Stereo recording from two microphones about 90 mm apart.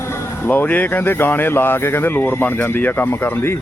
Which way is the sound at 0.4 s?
20° left (ahead or behind).